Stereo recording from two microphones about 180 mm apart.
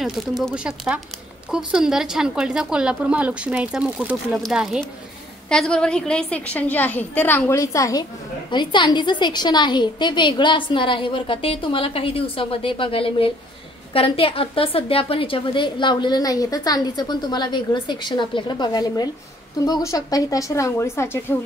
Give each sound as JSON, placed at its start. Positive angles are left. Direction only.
{"t": 0.4, "sound": "a woman's voice", "side_deg": -5}